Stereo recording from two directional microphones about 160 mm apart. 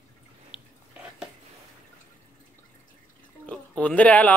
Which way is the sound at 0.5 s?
35° left (ahead or behind).